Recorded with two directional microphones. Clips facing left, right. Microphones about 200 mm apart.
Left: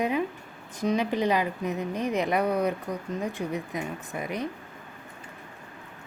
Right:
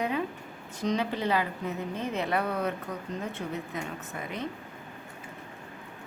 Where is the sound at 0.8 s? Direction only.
15° left (ahead or behind).